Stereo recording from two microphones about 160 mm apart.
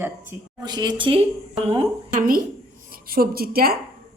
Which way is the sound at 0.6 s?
25° right (ahead or behind).